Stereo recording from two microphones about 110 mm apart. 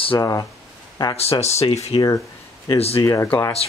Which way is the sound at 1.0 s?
50° left (ahead or behind).